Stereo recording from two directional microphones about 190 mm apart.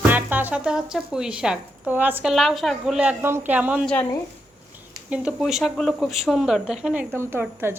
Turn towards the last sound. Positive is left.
turn(degrees=-10)  # may be behind; listen again after turning